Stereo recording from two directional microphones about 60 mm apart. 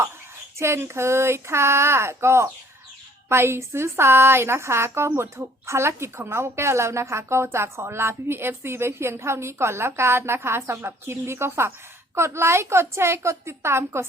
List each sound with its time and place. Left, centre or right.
0.6 s a woman's voice: right